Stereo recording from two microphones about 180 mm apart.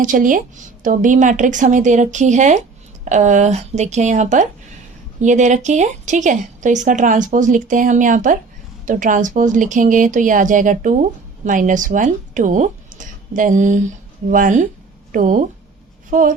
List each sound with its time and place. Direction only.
0.0 s speech: 45° right (ahead or behind)